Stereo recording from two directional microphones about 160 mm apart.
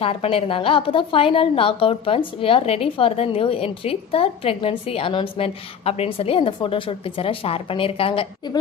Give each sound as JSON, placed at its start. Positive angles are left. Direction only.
{"t": 0.0, "sound": "a woman's voice", "side_deg": 35}